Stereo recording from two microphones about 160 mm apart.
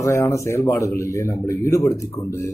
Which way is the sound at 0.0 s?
20° left (ahead or behind).